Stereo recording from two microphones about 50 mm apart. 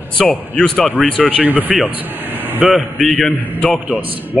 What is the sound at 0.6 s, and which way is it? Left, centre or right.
Speech, centre.